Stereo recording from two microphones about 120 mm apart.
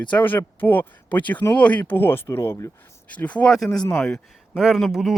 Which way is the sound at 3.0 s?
10° left (ahead or behind).